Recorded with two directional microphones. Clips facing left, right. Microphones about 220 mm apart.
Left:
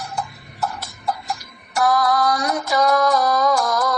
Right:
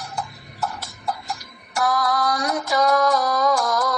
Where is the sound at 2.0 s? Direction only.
60° left (ahead or behind).